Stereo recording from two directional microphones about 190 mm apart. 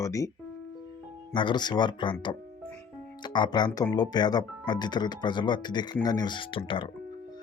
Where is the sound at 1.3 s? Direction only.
25° left (ahead or behind).